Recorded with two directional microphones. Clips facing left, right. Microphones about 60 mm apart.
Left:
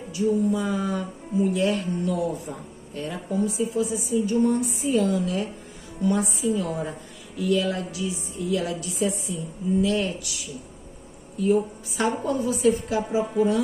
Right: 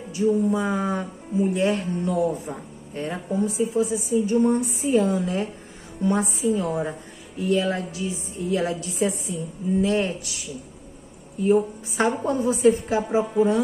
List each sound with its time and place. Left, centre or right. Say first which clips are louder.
0.1 s a woman's voice: right 2 dB; right
11.4 s speech: right 2 dB; right